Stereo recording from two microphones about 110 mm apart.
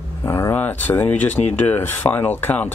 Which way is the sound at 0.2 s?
25° left (ahead or behind).